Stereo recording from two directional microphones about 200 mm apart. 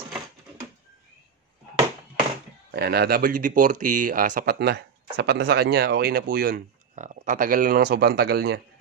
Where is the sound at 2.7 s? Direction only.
55° right (ahead or behind).